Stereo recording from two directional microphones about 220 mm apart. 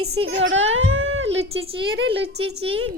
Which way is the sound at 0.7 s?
55° right (ahead or behind).